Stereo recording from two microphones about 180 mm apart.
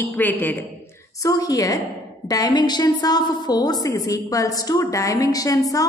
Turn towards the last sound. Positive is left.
turn(degrees=20)  # may be behind; listen again after turning